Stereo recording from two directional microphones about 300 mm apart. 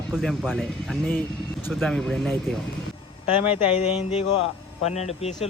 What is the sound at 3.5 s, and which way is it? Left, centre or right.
Speech, centre.